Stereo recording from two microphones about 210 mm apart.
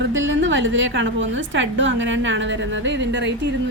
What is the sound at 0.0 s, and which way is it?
A woman's voice, 60° right (ahead or behind).